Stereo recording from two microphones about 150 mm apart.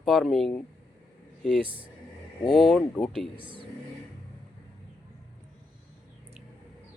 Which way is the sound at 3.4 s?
35° right (ahead or behind).